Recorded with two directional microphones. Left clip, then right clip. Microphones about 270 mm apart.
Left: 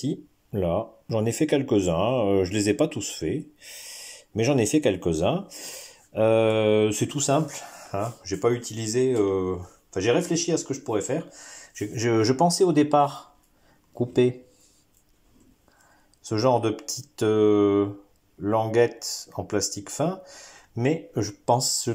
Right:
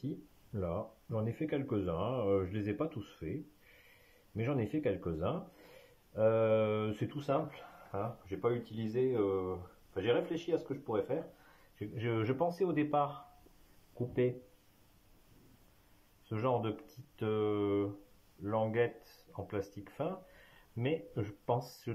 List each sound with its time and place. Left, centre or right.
0.0 s speech: left
4.4 s speech: left
16.3 s speech: centre